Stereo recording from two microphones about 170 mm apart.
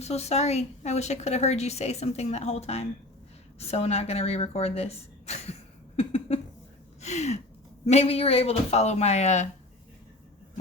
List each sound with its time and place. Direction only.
0.0 s a woman's voice: 40° left (ahead or behind)
6.0 s a sound: 40° left (ahead or behind)
7.9 s a woman's voice: 35° left (ahead or behind)